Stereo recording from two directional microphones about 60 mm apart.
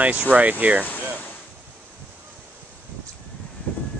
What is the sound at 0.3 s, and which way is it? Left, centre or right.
Speech, right.